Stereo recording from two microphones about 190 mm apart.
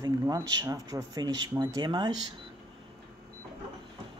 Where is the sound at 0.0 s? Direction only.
20° right (ahead or behind).